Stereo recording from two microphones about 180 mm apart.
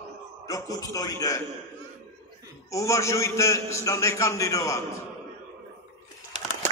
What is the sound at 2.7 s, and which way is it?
A man's voice, 15° left (ahead or behind).